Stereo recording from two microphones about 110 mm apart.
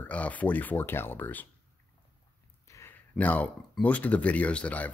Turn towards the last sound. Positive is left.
turn(degrees=15)  # may be behind; listen again after turning